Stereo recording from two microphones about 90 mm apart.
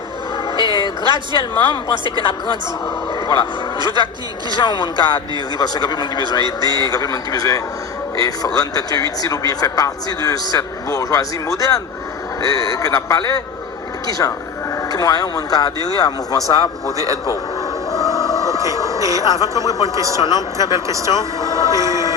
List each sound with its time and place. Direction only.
0.3 s music: 55° left (ahead or behind)
1.4 s a woman's voice: 55° left (ahead or behind); by 18.9 s 40° left (ahead or behind)
18.9 s speech: 35° right (ahead or behind)
19.2 s speech: 45° left (ahead or behind)
19.9 s a man's voice: 35° right (ahead or behind)
20.1 s speech: 45° left (ahead or behind)
20.8 s a man's voice: 35° right (ahead or behind)
21.1 s music: 45° left (ahead or behind)